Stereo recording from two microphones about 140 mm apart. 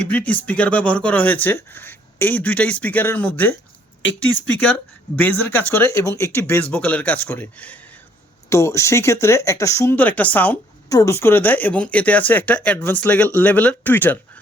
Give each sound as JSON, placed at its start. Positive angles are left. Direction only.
{"t": 0.0, "sound": "speech", "side_deg": 10}
{"t": 10.8, "sound": "speech", "side_deg": 25}